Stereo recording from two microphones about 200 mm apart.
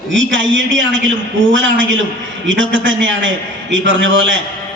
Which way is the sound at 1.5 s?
70° right (ahead or behind).